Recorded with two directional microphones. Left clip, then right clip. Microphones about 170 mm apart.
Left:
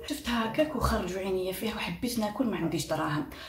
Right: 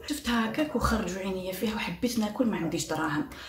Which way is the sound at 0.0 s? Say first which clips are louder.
Right 2 dB; 20° right (ahead or behind).